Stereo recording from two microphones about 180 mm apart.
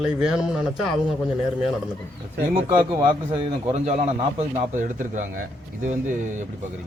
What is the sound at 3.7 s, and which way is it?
Speech, 40° right (ahead or behind).